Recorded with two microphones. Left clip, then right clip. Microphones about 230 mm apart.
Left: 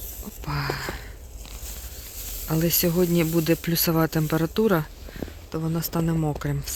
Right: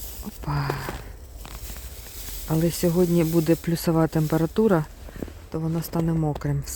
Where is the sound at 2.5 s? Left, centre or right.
Centre.